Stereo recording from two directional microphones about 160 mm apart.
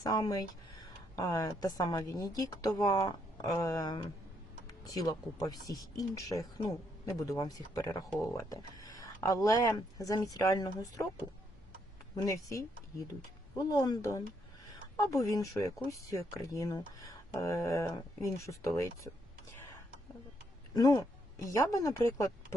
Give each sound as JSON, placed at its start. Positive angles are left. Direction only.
{"t": 0.0, "sound": "speech", "side_deg": 20}
{"t": 12.1, "sound": "speech", "side_deg": 20}
{"t": 13.7, "sound": "speech", "side_deg": 25}
{"t": 20.7, "sound": "a sound", "side_deg": 20}
{"t": 21.5, "sound": "speech", "side_deg": 20}